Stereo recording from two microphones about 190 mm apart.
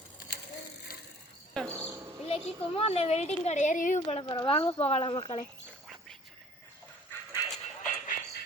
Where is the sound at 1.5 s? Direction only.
5° left (ahead or behind).